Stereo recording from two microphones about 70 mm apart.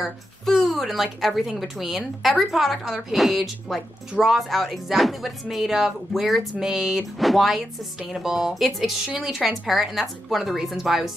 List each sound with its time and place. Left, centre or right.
0.5 s speech: centre